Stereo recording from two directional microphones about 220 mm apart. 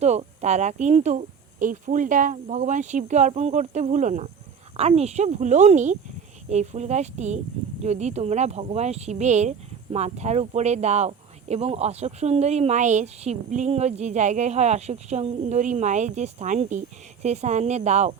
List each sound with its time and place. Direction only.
0.0 s speech: 30° right (ahead or behind)